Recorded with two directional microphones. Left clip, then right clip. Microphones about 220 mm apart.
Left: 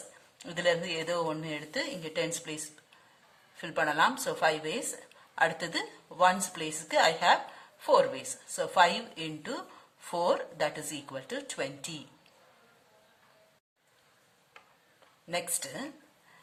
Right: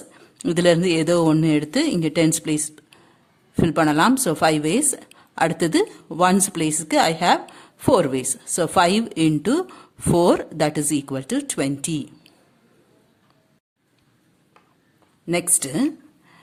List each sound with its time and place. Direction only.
0.4 s speech: 45° right (ahead or behind)
15.3 s speech: 40° right (ahead or behind)